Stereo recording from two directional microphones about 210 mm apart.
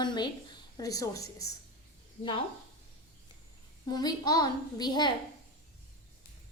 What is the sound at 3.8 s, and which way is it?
A child's voice, 20° left (ahead or behind).